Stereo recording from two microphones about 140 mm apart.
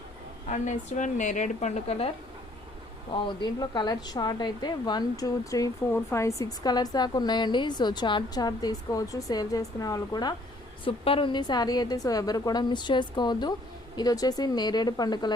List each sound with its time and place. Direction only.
0.4 s a woman's voice: 60° left (ahead or behind); by 10.3 s 30° left (ahead or behind)
10.8 s a woman's voice: 40° left (ahead or behind)